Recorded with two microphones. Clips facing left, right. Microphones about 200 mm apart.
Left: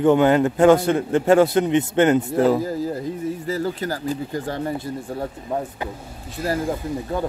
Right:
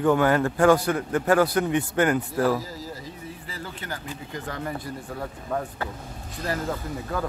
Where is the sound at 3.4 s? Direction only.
40° left (ahead or behind).